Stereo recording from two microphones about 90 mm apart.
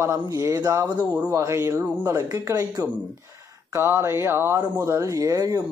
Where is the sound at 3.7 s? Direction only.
30° right (ahead or behind).